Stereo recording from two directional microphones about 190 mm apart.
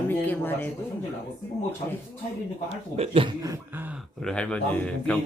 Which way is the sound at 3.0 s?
30° right (ahead or behind).